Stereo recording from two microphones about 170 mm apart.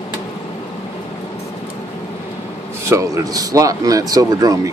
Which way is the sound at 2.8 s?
20° right (ahead or behind).